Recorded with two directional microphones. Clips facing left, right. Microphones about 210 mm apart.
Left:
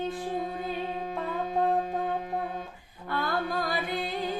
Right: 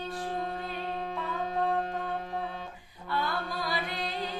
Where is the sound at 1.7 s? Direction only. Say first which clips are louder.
Left 3 dB; 10° left (ahead or behind).